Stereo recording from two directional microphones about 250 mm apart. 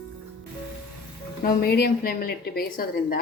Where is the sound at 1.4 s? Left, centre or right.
Left.